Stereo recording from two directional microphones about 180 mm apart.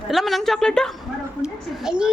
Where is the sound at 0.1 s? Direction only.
Centre (ahead or behind).